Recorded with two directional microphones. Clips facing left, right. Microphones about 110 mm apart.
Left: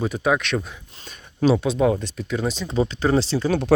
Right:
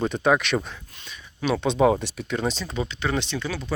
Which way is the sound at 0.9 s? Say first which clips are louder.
Left 9 dB; 40° left (ahead or behind).